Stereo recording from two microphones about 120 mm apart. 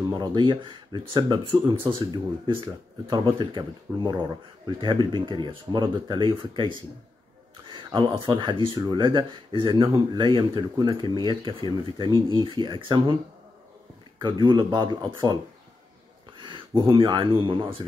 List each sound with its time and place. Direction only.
0.1 s speech: 35° right (ahead or behind)
14.2 s speech: 40° right (ahead or behind)
16.3 s a sound: 45° right (ahead or behind)
17.4 s speech: 45° right (ahead or behind)